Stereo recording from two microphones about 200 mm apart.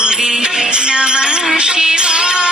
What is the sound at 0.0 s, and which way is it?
Music, 5° right (ahead or behind).